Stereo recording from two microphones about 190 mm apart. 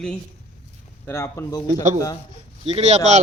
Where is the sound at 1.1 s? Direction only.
15° left (ahead or behind).